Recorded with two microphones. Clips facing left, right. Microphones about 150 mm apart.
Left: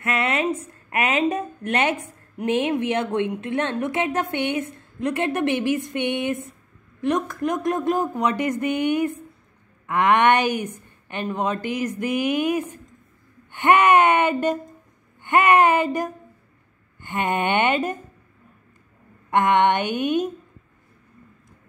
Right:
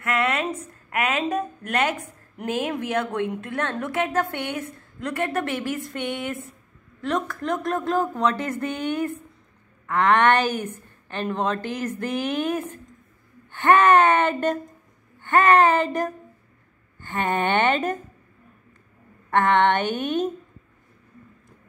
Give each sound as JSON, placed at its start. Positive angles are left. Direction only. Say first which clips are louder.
{"t": 0.0, "sound": "a sound", "louder": "left 1 dB", "side_deg": 25}
{"t": 0.6, "sound": "a woman's voice", "louder": "left 2 dB", "side_deg": 25}
{"t": 19.3, "sound": "speech", "louder": "left 1 dB", "side_deg": 15}